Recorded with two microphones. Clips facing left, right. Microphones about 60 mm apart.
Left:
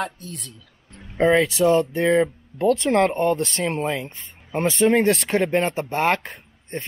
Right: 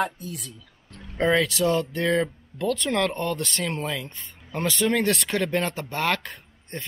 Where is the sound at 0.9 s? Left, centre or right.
Left.